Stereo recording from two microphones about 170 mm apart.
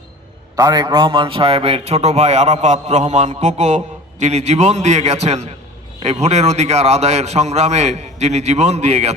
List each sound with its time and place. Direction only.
0.5 s a man's voice: 20° right (ahead or behind); by 9.1 s 40° right (ahead or behind)